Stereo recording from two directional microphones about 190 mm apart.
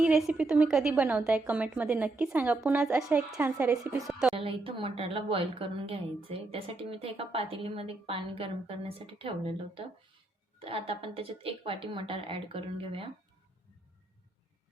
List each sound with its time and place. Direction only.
0.0 s a woman's voice: 5° right (ahead or behind)
4.1 s a woman's voice: 5° right (ahead or behind)
4.4 s a woman's voice: 30° right (ahead or behind)